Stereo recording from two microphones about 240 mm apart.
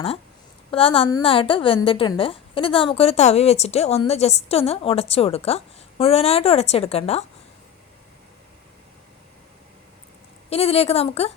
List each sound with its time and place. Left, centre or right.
0.7 s a woman's voice: left
10.5 s a woman's voice: left